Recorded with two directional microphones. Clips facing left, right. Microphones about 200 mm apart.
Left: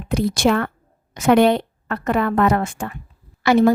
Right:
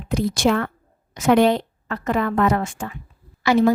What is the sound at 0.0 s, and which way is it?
A woman's voice, 65° left (ahead or behind).